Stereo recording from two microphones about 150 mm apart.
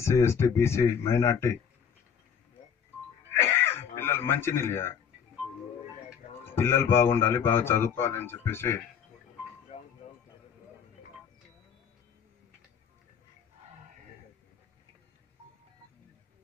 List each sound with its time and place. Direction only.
0.0 s a man's voice: 15° left (ahead or behind)
3.3 s a sound: 15° left (ahead or behind)
6.4 s a man's voice: 15° left (ahead or behind)